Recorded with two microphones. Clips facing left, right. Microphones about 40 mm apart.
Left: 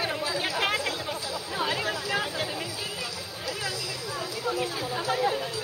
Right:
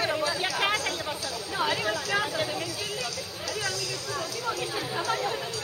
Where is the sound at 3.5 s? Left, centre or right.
Centre.